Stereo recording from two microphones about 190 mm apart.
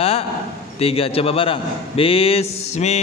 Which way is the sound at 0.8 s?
30° left (ahead or behind).